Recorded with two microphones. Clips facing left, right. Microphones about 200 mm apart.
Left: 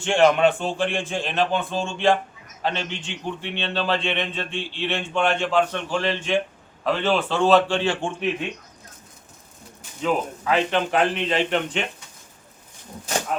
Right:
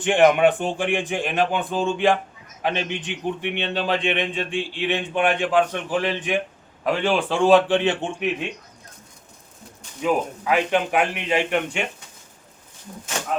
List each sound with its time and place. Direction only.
0.0 s a man's voice: 15° right (ahead or behind)
10.0 s a man's voice: 10° right (ahead or behind)